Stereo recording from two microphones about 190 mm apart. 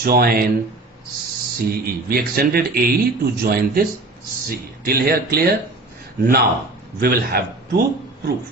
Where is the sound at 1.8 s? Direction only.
50° right (ahead or behind).